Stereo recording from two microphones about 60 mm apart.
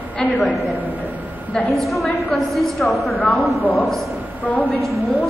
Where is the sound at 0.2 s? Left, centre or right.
Centre.